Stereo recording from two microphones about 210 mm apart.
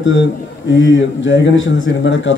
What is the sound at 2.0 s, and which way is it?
Speech, 60° left (ahead or behind).